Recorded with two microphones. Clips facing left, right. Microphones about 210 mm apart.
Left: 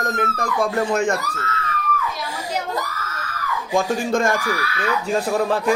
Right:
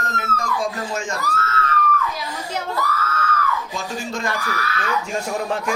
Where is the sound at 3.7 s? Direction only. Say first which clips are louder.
Left 8 dB; 50° left (ahead or behind).